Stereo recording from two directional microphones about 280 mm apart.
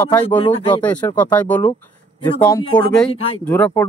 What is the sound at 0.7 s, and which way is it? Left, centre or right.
Speech, centre.